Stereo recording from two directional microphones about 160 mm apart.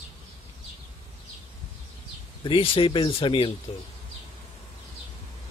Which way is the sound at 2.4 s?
35° left (ahead or behind).